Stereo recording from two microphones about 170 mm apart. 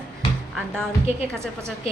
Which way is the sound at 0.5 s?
5° left (ahead or behind).